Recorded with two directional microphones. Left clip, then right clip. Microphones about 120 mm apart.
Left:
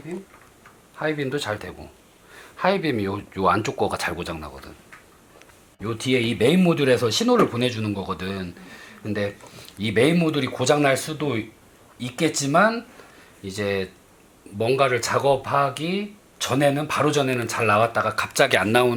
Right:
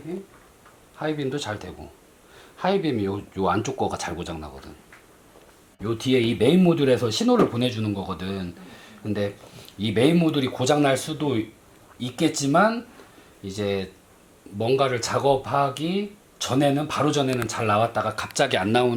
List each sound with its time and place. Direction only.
0.9 s speech: 15° left (ahead or behind)
5.8 s speech: 5° left (ahead or behind)